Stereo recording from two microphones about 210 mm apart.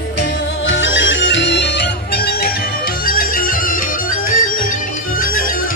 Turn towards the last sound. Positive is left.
turn(degrees=40)  # may be behind; listen again after turning